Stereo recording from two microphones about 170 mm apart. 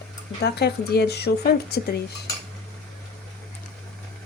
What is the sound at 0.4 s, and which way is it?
Speech, 75° left (ahead or behind).